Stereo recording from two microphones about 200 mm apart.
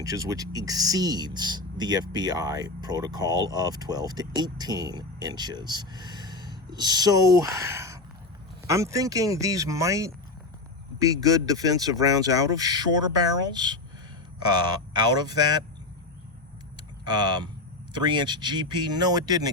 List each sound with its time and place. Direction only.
0.0 s speech: 15° right (ahead or behind)
17.1 s speech: 20° right (ahead or behind)